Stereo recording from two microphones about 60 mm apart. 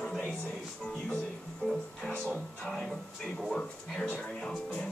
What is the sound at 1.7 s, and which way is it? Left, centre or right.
Music, centre.